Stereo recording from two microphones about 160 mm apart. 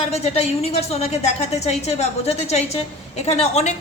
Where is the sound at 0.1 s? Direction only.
40° left (ahead or behind).